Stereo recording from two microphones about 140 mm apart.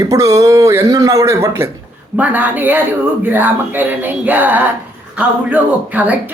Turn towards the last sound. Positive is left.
turn(degrees=-10)  # may be behind; listen again after turning